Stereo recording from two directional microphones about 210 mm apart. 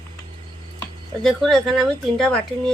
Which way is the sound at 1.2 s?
Centre (ahead or behind).